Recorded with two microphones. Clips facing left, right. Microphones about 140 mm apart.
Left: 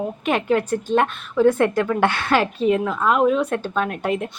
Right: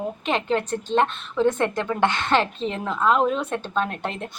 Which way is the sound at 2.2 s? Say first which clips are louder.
Left 3 dB; 10° left (ahead or behind).